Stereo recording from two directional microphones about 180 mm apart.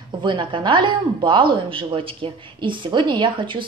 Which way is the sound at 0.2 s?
25° right (ahead or behind).